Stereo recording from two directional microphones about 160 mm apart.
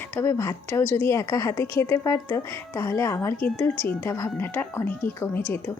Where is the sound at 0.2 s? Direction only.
15° left (ahead or behind).